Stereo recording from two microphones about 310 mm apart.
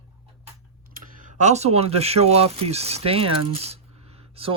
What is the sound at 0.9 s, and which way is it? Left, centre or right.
Speech, right.